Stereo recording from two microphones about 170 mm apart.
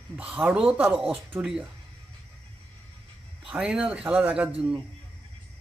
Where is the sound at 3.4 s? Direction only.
5° right (ahead or behind).